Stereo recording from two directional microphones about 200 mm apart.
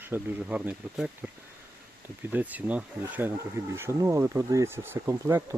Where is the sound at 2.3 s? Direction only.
10° right (ahead or behind).